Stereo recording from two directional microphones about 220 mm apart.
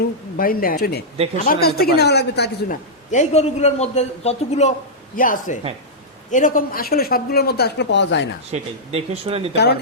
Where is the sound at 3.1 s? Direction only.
30° left (ahead or behind); by 8.2 s 55° left (ahead or behind).